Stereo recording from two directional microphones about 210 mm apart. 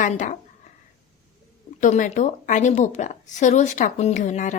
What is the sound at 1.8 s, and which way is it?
A woman's voice, 35° left (ahead or behind).